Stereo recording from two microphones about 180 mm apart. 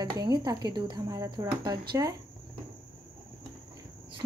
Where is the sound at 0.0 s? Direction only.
20° right (ahead or behind).